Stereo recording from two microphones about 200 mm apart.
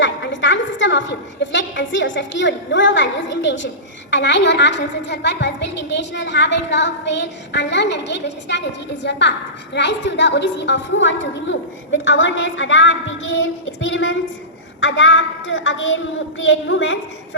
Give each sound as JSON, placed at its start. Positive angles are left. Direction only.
{"t": 0.0, "sound": "a woman's voice", "side_deg": 70}